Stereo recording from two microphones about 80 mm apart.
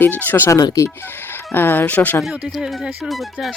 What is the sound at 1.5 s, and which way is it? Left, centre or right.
Speech, left.